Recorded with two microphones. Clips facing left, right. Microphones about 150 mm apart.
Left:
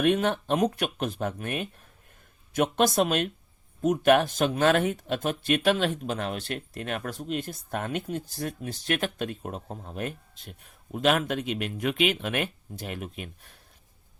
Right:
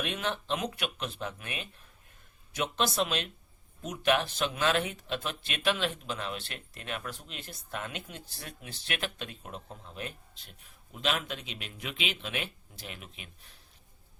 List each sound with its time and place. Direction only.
0.0 s speech: 50° left (ahead or behind)